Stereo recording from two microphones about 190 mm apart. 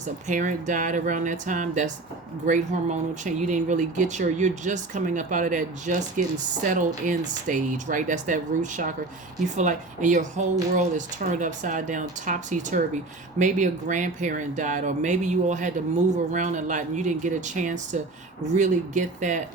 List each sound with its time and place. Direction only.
0.0 s speech: 40° right (ahead or behind)